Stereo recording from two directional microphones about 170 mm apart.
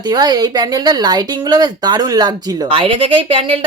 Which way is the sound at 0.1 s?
25° right (ahead or behind).